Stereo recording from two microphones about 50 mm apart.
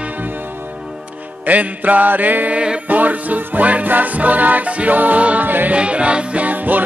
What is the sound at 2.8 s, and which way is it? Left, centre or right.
Music, right.